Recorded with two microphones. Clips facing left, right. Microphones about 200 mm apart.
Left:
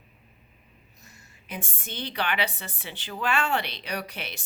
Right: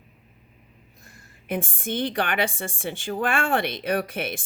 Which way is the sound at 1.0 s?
55° right (ahead or behind).